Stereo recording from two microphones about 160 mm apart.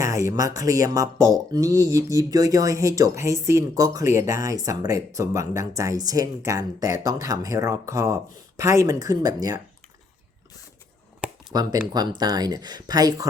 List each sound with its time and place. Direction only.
0.0 s speech: 20° right (ahead or behind)
11.5 s speech: 25° right (ahead or behind)